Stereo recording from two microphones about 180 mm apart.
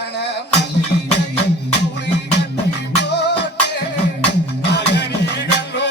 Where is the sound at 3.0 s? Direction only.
70° left (ahead or behind).